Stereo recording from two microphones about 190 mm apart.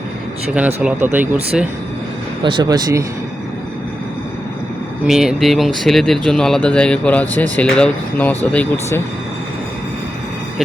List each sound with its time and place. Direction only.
0.8 s speech: 10° right (ahead or behind)
2.4 s speech: 25° right (ahead or behind)
5.0 s speech: centre (ahead or behind); by 9.0 s 15° left (ahead or behind)